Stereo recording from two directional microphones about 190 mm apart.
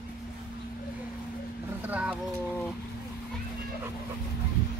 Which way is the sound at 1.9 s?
10° right (ahead or behind).